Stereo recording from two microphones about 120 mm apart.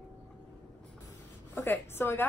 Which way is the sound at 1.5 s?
20° left (ahead or behind).